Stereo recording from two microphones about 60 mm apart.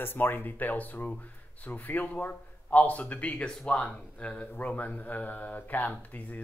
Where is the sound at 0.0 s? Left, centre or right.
Left.